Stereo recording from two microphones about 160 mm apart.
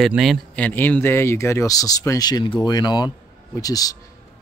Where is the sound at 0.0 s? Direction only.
Centre (ahead or behind); by 4.0 s 25° left (ahead or behind).